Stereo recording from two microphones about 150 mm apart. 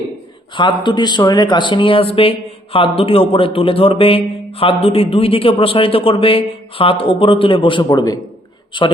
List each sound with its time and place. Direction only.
0.5 s speech: 30° left (ahead or behind)